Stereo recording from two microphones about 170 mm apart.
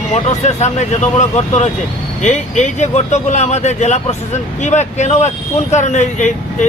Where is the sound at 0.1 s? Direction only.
40° left (ahead or behind).